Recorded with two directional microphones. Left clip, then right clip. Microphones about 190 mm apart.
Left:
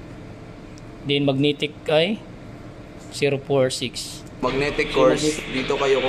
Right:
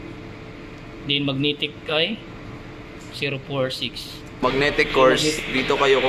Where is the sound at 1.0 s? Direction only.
55° left (ahead or behind).